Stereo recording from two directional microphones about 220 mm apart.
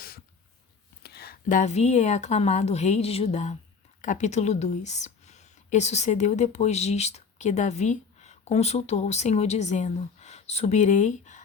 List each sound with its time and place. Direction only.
1.0 s speech: 45° left (ahead or behind)